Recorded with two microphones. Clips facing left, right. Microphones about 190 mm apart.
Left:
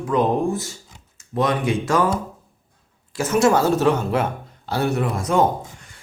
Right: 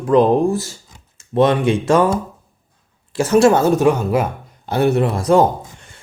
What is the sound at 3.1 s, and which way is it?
Speech, 30° right (ahead or behind).